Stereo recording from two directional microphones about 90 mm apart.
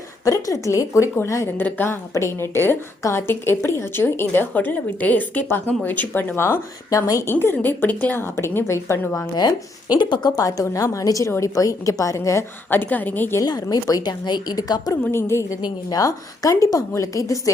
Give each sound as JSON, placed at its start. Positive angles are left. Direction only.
{"t": 0.3, "sound": "a woman's voice", "side_deg": 35}
{"t": 7.3, "sound": "a woman's voice", "side_deg": 25}
{"t": 9.3, "sound": "a woman's voice", "side_deg": 50}
{"t": 12.7, "sound": "a woman's voice", "side_deg": 20}
{"t": 13.4, "sound": "a woman's voice", "side_deg": 45}
{"t": 15.1, "sound": "a woman's voice", "side_deg": 30}
{"t": 15.6, "sound": "a woman's voice", "side_deg": 40}